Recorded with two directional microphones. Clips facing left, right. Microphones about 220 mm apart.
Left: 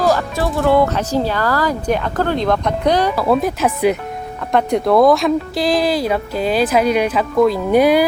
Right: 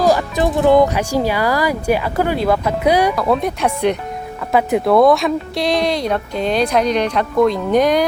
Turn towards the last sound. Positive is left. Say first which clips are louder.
# left 2 dB
turn(degrees=5)  # may be behind; listen again after turning